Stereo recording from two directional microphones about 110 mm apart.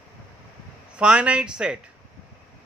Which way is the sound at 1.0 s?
10° right (ahead or behind).